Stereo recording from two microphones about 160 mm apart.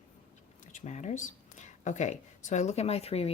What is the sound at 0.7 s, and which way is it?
Speech, 45° left (ahead or behind).